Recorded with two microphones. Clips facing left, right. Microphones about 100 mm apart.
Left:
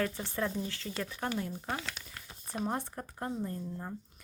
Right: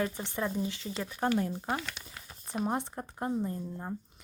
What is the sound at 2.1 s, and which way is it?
Speech, 10° right (ahead or behind).